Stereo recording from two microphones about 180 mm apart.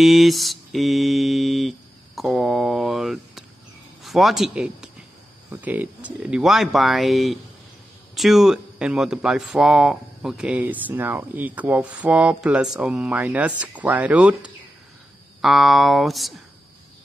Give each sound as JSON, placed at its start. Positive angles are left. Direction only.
{"t": 0.0, "sound": "mantra", "side_deg": 0}
{"t": 4.0, "sound": "speech", "side_deg": 0}
{"t": 5.5, "sound": "mantra", "side_deg": -10}
{"t": 8.1, "sound": "speech", "side_deg": 0}
{"t": 15.4, "sound": "mantra", "side_deg": 0}